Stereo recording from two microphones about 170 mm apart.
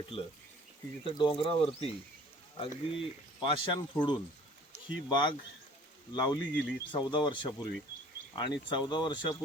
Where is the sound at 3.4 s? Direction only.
30° left (ahead or behind).